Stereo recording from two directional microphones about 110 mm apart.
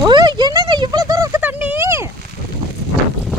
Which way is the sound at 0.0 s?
40° right (ahead or behind).